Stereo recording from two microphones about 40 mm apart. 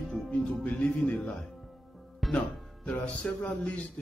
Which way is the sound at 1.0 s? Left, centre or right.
Left.